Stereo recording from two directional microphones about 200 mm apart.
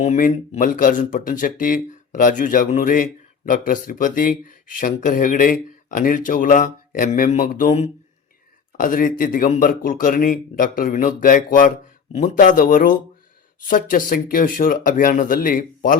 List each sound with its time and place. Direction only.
0.0 s a man's voice: 40° left (ahead or behind)